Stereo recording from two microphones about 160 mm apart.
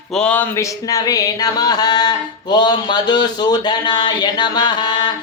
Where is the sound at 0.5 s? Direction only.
20° left (ahead or behind).